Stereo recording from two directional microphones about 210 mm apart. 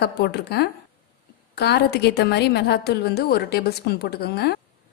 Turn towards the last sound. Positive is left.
turn(degrees=50)  # may be behind; listen again after turning